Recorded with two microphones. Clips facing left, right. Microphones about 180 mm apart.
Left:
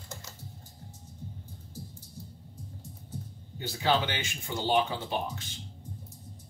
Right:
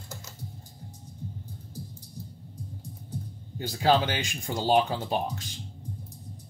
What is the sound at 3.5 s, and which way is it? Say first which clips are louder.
Speech: right 4 dB; 45° right (ahead or behind).